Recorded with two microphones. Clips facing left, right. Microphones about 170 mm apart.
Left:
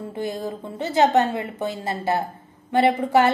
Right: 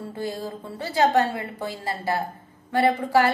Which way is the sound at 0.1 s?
20° left (ahead or behind).